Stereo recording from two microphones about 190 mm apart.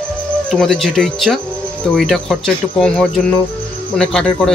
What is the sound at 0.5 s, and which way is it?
A man's voice, centre (ahead or behind).